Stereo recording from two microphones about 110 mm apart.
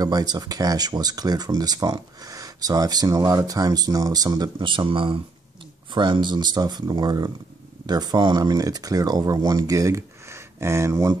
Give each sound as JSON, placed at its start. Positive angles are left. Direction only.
{"t": 0.0, "sound": "speech", "side_deg": -35}